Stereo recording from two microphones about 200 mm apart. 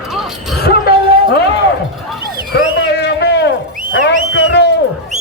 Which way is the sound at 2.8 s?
55° left (ahead or behind).